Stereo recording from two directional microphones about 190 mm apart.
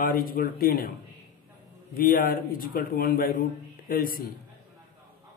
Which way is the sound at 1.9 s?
50° left (ahead or behind).